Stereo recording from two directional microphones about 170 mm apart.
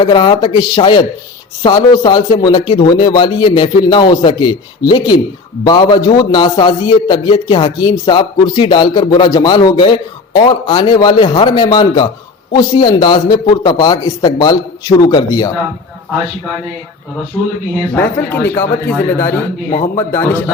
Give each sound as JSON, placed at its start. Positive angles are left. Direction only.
{"t": 0.0, "sound": "a man's voice", "side_deg": 25}
{"t": 17.9, "sound": "speech", "side_deg": 10}